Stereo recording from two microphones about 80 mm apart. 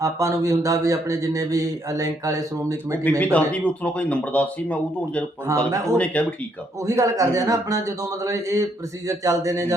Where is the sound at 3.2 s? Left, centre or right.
Centre.